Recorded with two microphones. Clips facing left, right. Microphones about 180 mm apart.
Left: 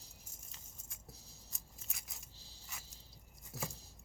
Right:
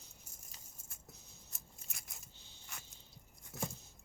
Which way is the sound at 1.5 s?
Centre (ahead or behind).